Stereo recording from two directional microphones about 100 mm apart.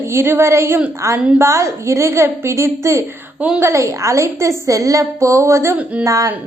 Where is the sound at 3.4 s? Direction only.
10° right (ahead or behind).